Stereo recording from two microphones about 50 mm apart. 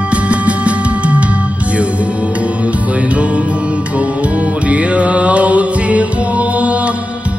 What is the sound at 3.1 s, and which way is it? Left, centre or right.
Music, right.